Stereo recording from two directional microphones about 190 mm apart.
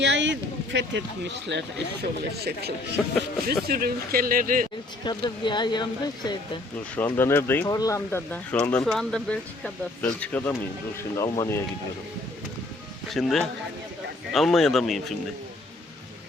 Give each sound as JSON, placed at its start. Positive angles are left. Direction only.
{"t": 0.0, "sound": "a man's voice", "side_deg": -70}
{"t": 3.0, "sound": "speech", "side_deg": 5}
{"t": 3.4, "sound": "speech", "side_deg": -50}
{"t": 5.0, "sound": "speech", "side_deg": 25}
{"t": 6.9, "sound": "speech", "side_deg": 10}
{"t": 13.1, "sound": "speech", "side_deg": 0}